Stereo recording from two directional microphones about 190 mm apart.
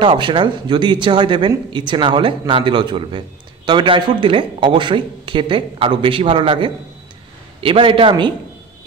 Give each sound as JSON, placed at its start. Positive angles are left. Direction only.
{"t": 0.0, "sound": "speech", "side_deg": -25}